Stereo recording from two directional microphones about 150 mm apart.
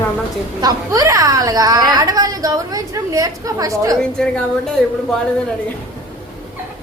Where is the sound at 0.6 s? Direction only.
25° right (ahead or behind).